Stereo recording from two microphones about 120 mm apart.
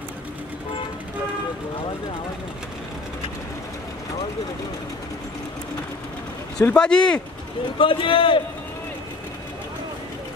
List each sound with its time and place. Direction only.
6.6 s speech: 10° left (ahead or behind)
7.8 s a man's voice: 45° left (ahead or behind)